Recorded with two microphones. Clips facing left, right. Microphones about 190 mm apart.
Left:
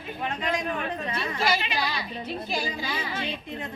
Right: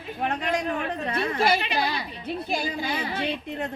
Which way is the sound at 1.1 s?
55° right (ahead or behind).